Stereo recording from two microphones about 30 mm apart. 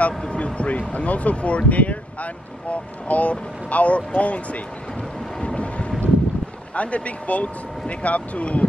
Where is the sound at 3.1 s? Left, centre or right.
Left.